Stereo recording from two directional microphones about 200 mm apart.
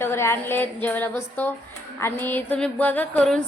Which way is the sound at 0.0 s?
10° left (ahead or behind).